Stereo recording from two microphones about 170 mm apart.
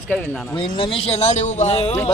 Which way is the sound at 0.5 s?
30° left (ahead or behind).